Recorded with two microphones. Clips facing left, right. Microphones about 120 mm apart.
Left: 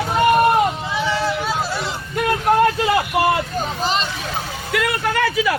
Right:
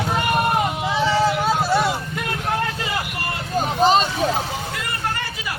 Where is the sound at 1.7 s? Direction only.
55° right (ahead or behind).